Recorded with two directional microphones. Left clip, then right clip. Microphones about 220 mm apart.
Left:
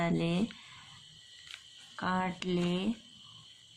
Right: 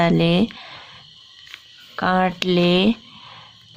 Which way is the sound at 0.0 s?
40° right (ahead or behind).